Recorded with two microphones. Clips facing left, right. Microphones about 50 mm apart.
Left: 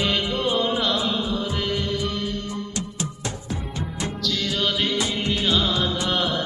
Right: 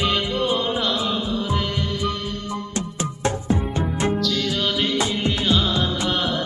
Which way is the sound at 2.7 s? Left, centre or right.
Right.